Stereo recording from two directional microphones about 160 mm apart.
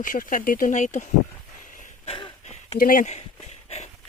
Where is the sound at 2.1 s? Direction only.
35° left (ahead or behind).